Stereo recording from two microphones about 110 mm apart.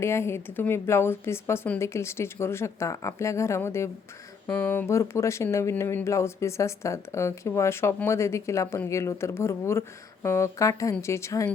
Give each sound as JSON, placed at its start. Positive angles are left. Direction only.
{"t": 0.0, "sound": "speech", "side_deg": 25}